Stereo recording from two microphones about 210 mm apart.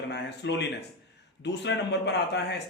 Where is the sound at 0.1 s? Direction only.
55° left (ahead or behind).